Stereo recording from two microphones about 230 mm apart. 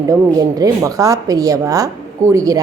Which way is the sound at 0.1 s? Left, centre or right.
Centre.